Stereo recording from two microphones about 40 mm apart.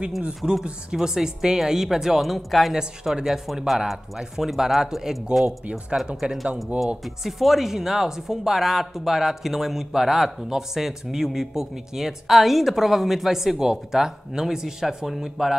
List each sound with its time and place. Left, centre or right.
0.4 s a man's voice: centre
2.2 s a man's voice: centre
6.2 s speech: right
7.2 s a man's voice: centre